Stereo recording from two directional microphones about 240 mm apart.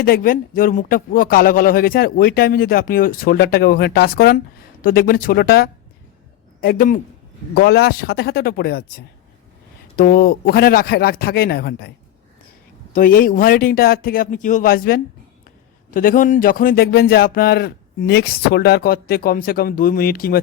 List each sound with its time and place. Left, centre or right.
0.0 s speech: left
9.9 s speech: left
12.9 s speech: left